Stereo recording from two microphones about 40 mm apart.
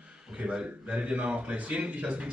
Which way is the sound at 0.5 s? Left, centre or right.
Right.